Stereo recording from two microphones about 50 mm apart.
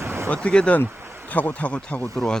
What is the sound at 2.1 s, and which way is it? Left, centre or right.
Speech, centre.